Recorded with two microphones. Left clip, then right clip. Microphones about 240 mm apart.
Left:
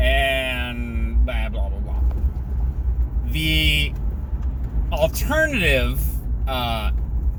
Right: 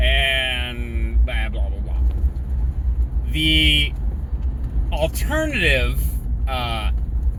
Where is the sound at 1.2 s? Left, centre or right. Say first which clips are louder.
Right 1 dB; centre.